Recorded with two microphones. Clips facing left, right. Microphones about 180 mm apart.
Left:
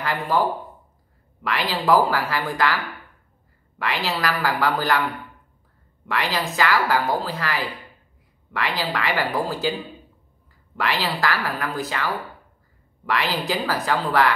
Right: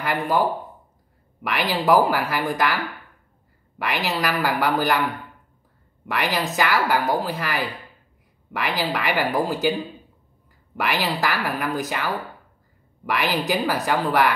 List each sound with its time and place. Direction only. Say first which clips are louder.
0.0 s a woman's voice: right 1 dB; 15° right (ahead or behind)
1.4 s a woman's voice: right 1 dB; 15° right (ahead or behind)
6.0 s a woman's voice: right 1 dB; 15° right (ahead or behind)
10.8 s a woman's voice: even; 15° right (ahead or behind)